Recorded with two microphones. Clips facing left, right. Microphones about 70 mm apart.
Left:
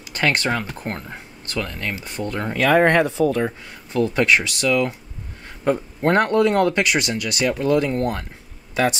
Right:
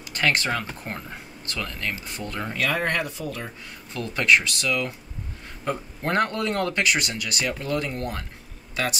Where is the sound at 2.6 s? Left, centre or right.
Left.